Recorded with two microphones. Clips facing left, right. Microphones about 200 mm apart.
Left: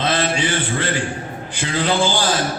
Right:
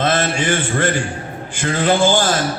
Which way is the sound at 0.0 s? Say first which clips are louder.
Right 2 dB; 45° right (ahead or behind).